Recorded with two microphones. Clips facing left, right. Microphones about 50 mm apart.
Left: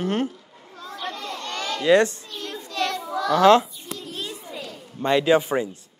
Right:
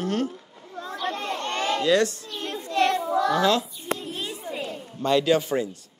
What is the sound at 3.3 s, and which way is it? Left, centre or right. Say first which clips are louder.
Speech: left 10 dB; left.